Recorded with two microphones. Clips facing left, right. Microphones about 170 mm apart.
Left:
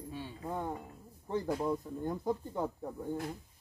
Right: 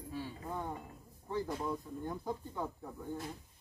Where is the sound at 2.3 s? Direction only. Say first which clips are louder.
Left 5 dB; 45° left (ahead or behind).